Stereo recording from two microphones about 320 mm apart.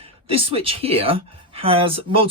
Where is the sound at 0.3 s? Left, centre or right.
Centre.